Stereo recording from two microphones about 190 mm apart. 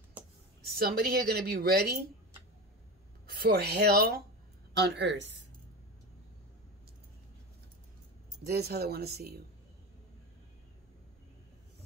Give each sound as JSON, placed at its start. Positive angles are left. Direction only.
{"t": 0.6, "sound": "speech", "side_deg": -55}
{"t": 3.3, "sound": "speech", "side_deg": -50}
{"t": 4.7, "sound": "a woman's voice", "side_deg": -65}
{"t": 8.5, "sound": "speech", "side_deg": -55}